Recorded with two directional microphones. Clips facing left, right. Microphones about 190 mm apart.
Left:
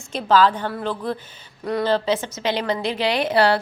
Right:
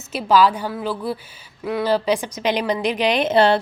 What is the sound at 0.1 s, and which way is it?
A woman's voice, 10° right (ahead or behind).